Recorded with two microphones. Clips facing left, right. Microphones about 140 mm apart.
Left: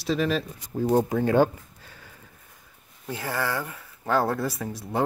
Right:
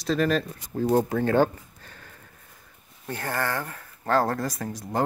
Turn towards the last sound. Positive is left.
turn(degrees=5)  # may be behind; listen again after turning